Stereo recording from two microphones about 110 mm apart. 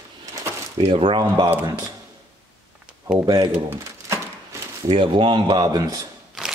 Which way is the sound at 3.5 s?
20° right (ahead or behind).